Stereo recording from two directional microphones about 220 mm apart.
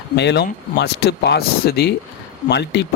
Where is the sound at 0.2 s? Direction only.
50° left (ahead or behind).